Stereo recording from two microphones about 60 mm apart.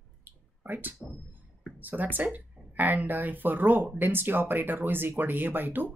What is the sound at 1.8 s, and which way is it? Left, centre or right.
Speech, right.